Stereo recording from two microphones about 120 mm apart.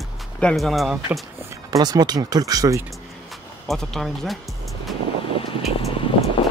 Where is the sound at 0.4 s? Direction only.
5° left (ahead or behind).